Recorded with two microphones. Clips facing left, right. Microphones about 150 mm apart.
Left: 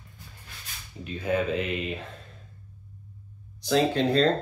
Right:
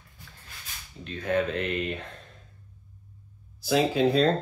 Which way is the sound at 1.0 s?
5° left (ahead or behind).